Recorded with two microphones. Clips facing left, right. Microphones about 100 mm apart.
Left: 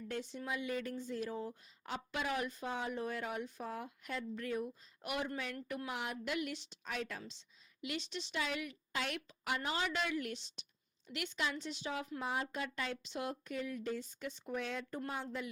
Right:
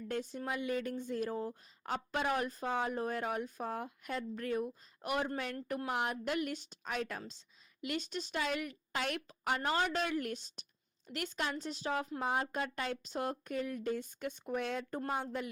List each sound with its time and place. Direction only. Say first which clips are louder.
0.1 s speech: right 3 dB; 45° right (ahead or behind)